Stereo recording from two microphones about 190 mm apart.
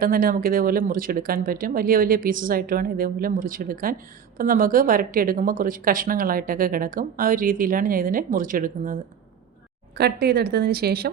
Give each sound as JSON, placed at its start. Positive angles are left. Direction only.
{"t": 0.0, "sound": "a woman's voice", "side_deg": -50}
{"t": 9.9, "sound": "speech", "side_deg": -55}